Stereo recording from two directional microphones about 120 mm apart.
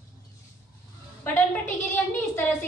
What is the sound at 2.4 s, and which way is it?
Speech, 15° left (ahead or behind).